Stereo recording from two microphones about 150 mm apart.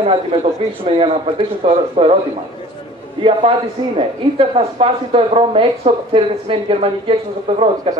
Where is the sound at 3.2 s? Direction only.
40° right (ahead or behind).